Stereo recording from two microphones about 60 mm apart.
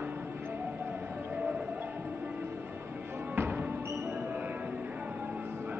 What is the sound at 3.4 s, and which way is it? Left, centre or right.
Music, right.